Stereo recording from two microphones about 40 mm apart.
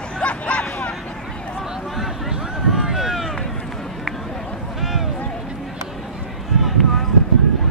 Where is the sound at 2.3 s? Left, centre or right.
Centre.